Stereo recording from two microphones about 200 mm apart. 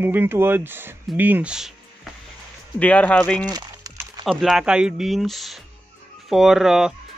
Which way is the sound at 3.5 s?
20° right (ahead or behind).